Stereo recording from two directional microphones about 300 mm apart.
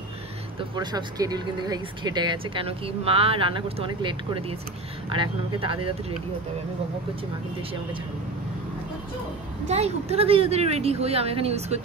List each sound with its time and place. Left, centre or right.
0.6 s speech: centre
9.7 s speech: right